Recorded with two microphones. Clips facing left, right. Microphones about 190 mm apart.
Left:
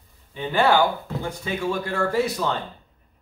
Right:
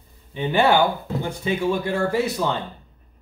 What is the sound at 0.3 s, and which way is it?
Speech, 20° right (ahead or behind).